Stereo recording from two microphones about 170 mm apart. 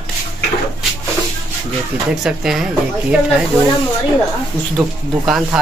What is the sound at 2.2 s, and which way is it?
Speech, centre (ahead or behind).